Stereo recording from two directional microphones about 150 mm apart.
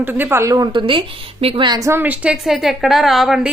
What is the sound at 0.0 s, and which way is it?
A woman's voice, 15° right (ahead or behind).